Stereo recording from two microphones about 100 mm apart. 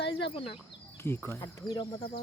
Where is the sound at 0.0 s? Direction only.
65° left (ahead or behind).